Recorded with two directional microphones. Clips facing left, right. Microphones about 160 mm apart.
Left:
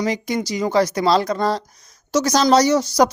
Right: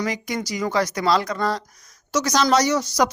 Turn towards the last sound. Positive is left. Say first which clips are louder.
# left 4 dB
turn(degrees=30)  # may be behind; listen again after turning